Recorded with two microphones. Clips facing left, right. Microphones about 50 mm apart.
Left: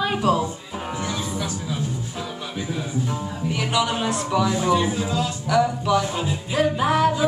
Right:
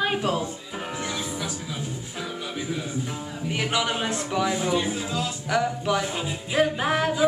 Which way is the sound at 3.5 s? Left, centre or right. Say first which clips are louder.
Left 2 dB; right.